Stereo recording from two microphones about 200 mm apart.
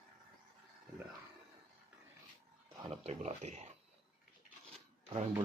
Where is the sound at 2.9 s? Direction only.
35° right (ahead or behind).